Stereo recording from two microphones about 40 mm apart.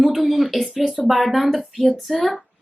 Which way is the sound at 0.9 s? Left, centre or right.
Centre.